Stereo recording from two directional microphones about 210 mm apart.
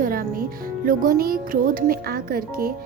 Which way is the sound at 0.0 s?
45° right (ahead or behind).